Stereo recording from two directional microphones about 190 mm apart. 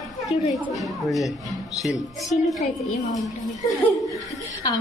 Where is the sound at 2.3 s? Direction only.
Centre (ahead or behind).